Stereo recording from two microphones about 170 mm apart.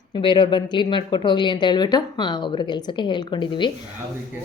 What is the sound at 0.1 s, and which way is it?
Speech, 30° left (ahead or behind).